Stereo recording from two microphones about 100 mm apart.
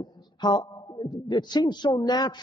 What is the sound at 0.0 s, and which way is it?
A man's voice, 45° left (ahead or behind).